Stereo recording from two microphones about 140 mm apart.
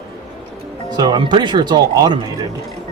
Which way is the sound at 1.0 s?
30° right (ahead or behind).